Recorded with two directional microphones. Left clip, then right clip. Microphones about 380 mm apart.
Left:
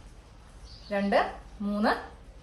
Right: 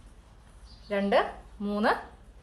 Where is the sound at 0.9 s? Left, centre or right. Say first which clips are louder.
Right 1 dB; right.